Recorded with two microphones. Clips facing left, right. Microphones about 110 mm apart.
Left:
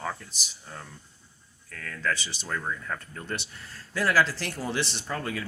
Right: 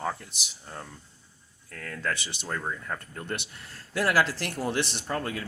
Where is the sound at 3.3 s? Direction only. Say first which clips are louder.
Even; 55° right (ahead or behind).